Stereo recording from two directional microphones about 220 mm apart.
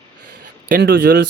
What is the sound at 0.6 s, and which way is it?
Speech, 40° right (ahead or behind).